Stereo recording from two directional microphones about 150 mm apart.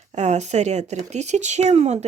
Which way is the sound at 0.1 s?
50° right (ahead or behind).